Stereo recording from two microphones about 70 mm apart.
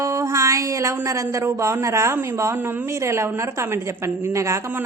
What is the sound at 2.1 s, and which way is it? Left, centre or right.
A woman's voice, right.